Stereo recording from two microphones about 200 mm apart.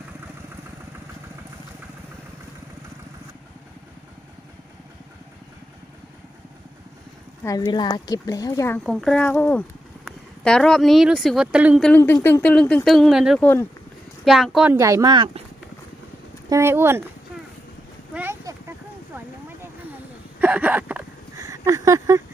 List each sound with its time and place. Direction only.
7.4 s speech: 15° left (ahead or behind); by 11.9 s 5° right (ahead or behind)
11.9 s speech: 10° left (ahead or behind)
13.4 s speech: 10° left (ahead or behind)
14.3 s speech: centre (ahead or behind); by 15.3 s 20° right (ahead or behind)
16.5 s speech: 15° right (ahead or behind)
18.1 s a sound: 10° right (ahead or behind)
20.4 s a sound: 10° right (ahead or behind)